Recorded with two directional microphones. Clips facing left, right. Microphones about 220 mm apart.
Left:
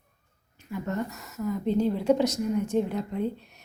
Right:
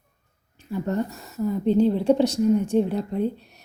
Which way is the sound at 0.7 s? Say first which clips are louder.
Right 5 dB; 30° right (ahead or behind).